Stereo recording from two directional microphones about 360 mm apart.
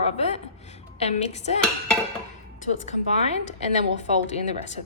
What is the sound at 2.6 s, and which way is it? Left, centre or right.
Speech, centre.